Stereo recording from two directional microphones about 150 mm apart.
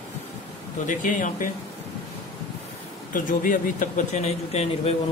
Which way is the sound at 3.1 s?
65° left (ahead or behind).